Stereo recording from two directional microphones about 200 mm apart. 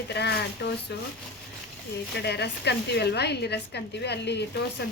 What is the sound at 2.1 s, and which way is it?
A woman's voice, 55° left (ahead or behind).